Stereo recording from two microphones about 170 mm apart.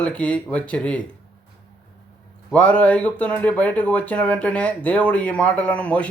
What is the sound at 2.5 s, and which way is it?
Speech, 10° left (ahead or behind).